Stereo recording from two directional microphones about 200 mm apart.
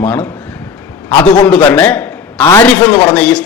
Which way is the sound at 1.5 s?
5° left (ahead or behind).